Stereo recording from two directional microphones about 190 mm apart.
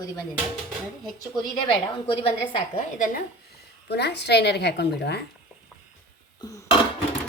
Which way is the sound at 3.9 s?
60° left (ahead or behind).